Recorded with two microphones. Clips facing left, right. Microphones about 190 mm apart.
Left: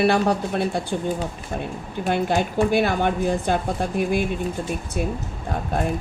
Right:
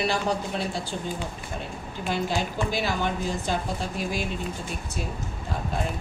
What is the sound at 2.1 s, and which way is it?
A woman's voice, 60° left (ahead or behind).